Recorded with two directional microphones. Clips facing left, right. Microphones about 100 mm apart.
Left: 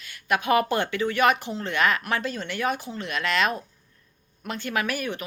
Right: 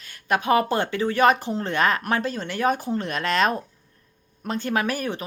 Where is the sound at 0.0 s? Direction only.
35° right (ahead or behind).